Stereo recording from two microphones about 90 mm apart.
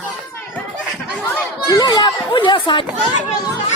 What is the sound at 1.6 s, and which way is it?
A child's voice, 50° left (ahead or behind).